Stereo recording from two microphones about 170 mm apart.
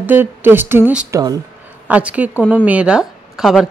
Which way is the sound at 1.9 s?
10° right (ahead or behind).